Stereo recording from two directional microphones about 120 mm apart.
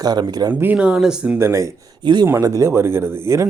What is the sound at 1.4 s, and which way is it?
Speech, 25° right (ahead or behind).